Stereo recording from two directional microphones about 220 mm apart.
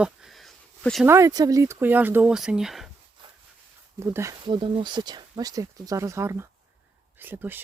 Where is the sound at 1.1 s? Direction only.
15° right (ahead or behind).